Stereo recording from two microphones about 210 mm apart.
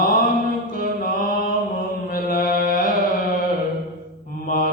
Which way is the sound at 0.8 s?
40° left (ahead or behind).